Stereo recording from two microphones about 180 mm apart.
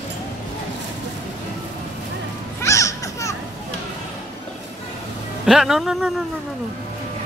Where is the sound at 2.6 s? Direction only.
15° left (ahead or behind).